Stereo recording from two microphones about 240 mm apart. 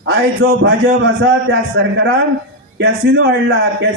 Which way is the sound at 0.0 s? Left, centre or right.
Right.